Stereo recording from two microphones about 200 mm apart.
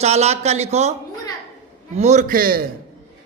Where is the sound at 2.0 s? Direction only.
35° right (ahead or behind).